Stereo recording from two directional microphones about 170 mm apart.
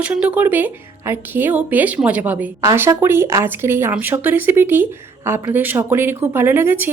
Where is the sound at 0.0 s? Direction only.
5° right (ahead or behind).